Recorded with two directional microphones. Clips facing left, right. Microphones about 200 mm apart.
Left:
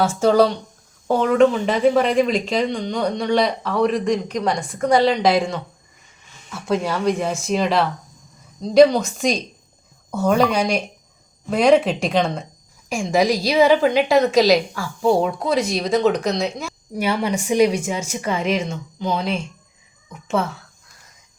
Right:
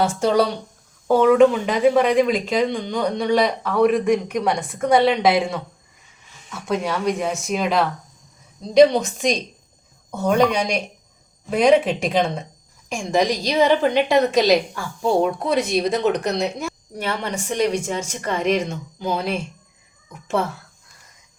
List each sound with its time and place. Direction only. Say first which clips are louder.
0.0 s speech: left 3 dB; centre (ahead or behind)
8.9 s a woman's voice: even; centre (ahead or behind)